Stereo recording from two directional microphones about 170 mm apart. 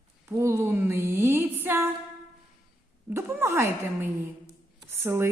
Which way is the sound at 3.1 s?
15° right (ahead or behind).